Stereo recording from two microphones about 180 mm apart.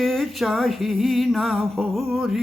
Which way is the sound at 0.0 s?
Centre (ahead or behind).